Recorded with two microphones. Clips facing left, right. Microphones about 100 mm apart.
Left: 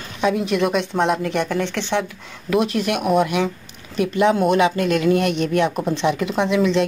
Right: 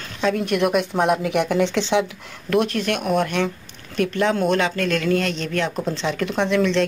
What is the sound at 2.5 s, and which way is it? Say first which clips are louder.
A woman's voice: left 1 dB; 5° left (ahead or behind).